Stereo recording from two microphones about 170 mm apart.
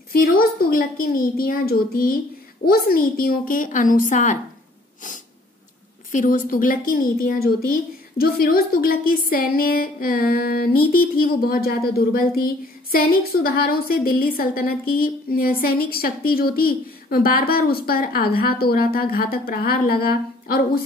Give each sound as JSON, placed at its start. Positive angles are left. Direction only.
{"t": 0.1, "sound": "a woman's voice", "side_deg": 60}
{"t": 6.1, "sound": "a woman's voice", "side_deg": 50}